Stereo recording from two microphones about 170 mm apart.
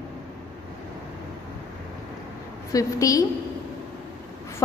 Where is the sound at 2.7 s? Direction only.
20° left (ahead or behind).